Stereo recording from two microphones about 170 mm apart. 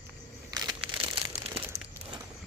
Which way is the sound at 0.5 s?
20° right (ahead or behind).